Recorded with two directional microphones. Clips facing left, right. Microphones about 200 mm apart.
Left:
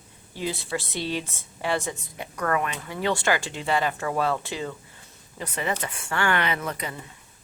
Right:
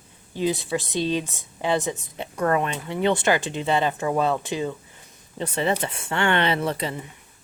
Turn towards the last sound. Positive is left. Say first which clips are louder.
# right 6 dB
turn(degrees=-25)  # may be behind; listen again after turning